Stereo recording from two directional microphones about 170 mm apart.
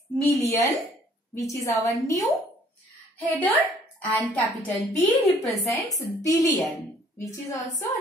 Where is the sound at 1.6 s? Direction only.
20° left (ahead or behind).